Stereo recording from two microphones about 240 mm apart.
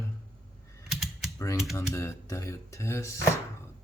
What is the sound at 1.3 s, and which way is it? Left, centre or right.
Speech, centre.